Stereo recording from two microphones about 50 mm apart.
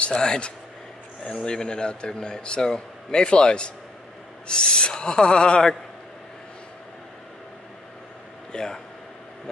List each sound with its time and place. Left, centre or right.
0.0 s a man's voice: centre
8.5 s speech: centre